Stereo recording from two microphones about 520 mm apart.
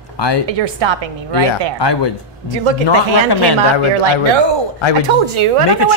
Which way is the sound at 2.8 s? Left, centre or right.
Left.